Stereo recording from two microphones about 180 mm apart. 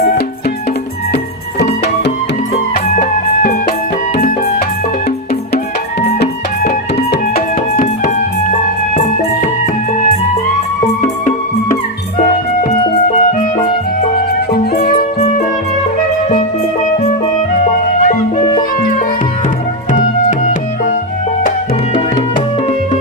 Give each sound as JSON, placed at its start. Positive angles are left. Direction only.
{"t": 2.7, "sound": "music", "side_deg": 50}
{"t": 6.6, "sound": "music", "side_deg": 60}
{"t": 12.1, "sound": "music", "side_deg": 45}
{"t": 14.5, "sound": "music", "side_deg": 60}
{"t": 16.8, "sound": "music", "side_deg": 45}
{"t": 19.9, "sound": "music", "side_deg": 45}